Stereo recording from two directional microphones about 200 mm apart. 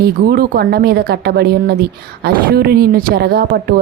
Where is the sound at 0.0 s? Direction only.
50° right (ahead or behind).